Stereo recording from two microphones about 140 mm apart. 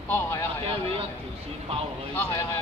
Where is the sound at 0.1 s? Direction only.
20° left (ahead or behind).